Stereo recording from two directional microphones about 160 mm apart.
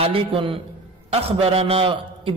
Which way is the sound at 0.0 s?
35° right (ahead or behind).